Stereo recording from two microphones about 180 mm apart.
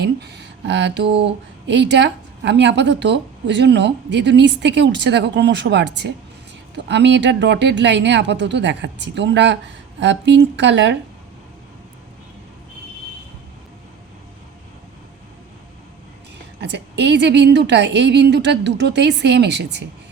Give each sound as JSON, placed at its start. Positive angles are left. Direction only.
{"t": 0.0, "sound": "speech", "side_deg": -70}
{"t": 16.6, "sound": "speech", "side_deg": -70}